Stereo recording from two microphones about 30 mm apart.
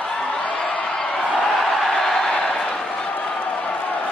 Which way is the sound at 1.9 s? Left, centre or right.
Centre.